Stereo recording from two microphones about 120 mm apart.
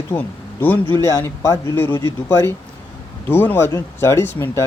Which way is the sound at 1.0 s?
25° left (ahead or behind).